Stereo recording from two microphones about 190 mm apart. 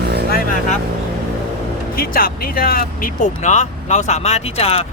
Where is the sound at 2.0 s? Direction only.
50° left (ahead or behind).